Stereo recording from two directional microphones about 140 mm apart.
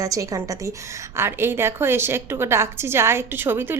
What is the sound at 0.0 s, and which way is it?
A woman's voice, 25° right (ahead or behind).